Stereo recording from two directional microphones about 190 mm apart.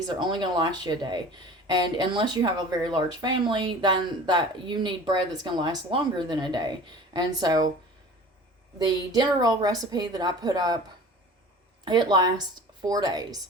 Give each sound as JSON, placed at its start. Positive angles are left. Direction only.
{"t": 0.2, "sound": "speech", "side_deg": -25}
{"t": 8.8, "sound": "speech", "side_deg": -20}
{"t": 11.9, "sound": "speech", "side_deg": -20}